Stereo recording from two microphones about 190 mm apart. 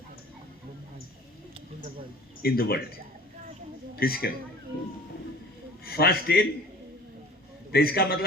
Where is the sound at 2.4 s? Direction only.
55° left (ahead or behind).